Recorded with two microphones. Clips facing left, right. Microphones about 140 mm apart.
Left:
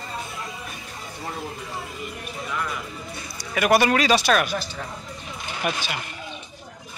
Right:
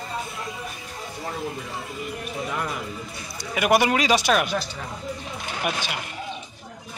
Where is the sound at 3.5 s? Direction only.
15° right (ahead or behind).